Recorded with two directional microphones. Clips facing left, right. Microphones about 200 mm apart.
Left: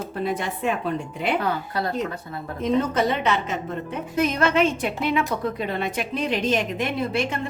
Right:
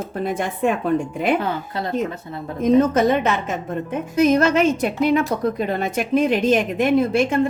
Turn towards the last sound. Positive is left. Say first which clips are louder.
# right 8 dB
turn(degrees=-50)  # may be behind; listen again after turning